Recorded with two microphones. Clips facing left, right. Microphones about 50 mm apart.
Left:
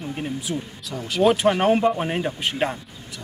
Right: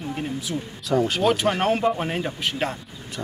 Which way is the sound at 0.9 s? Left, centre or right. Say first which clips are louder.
Right 3 dB; right.